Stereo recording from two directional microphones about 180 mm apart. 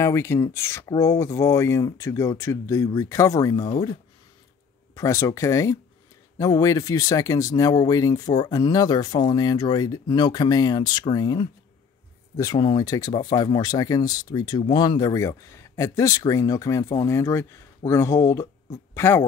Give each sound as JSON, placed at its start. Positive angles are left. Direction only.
{"t": 0.0, "sound": "speech", "side_deg": 15}